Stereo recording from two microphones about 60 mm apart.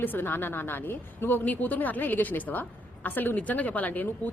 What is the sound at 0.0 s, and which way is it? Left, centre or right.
A woman's voice, left.